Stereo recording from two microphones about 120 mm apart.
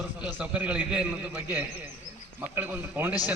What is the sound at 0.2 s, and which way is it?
A man's voice, 15° right (ahead or behind).